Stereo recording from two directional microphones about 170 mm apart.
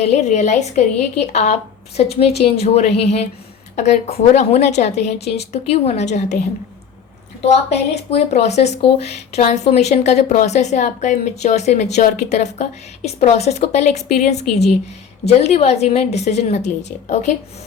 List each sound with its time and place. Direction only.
0.0 s speech: 40° left (ahead or behind)
8.1 s speech: 40° left (ahead or behind)